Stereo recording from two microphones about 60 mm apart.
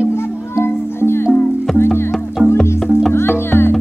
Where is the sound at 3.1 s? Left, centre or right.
Left.